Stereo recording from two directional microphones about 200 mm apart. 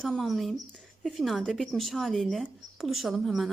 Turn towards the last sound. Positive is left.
turn(degrees=0)  # may be behind; listen again after turning